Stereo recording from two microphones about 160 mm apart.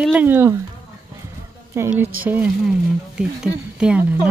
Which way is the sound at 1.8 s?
15° right (ahead or behind).